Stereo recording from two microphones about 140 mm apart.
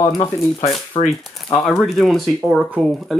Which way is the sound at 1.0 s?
40° left (ahead or behind).